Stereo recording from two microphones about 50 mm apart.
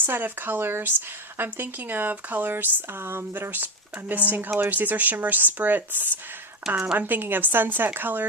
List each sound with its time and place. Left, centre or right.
0.0 s speech: right
3.9 s speech: right